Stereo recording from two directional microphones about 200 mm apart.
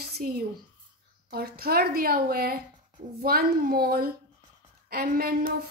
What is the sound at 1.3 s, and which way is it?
A woman's voice, 50° right (ahead or behind).